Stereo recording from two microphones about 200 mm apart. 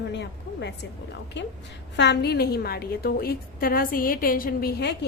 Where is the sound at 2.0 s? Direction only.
55° left (ahead or behind).